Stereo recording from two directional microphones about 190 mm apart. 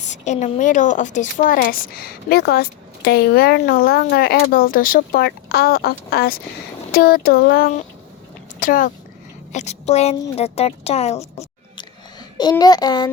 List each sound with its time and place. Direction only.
0.0 s speech: 40° left (ahead or behind)
11.2 s a sound: 15° left (ahead or behind)
12.4 s a child's voice: 20° left (ahead or behind)